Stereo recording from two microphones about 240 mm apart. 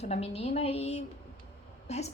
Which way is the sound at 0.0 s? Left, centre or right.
Left.